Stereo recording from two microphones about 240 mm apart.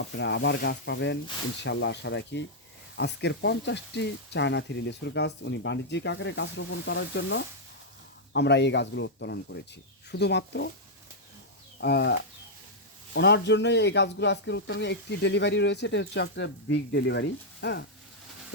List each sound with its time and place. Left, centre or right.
0.2 s speech: left
11.8 s speech: left
13.1 s speech: left